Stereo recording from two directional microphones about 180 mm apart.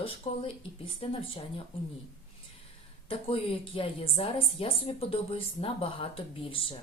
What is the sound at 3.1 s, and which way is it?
A woman's voice, 30° left (ahead or behind).